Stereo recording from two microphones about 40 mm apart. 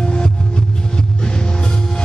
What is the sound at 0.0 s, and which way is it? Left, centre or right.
Music, left.